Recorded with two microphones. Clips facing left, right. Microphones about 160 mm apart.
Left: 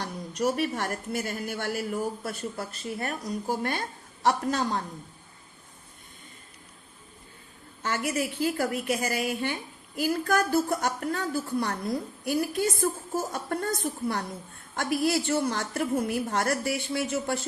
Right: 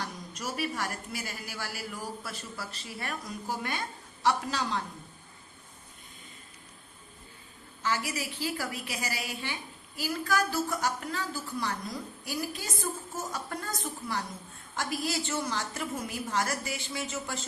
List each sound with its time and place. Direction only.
0.3 s a woman's voice: 55° left (ahead or behind)
7.8 s a woman's voice: 55° left (ahead or behind)